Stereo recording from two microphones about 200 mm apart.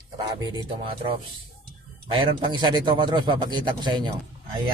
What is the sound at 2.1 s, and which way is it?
Speech, 20° right (ahead or behind).